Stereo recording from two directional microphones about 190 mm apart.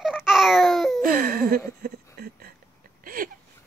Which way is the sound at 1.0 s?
50° right (ahead or behind).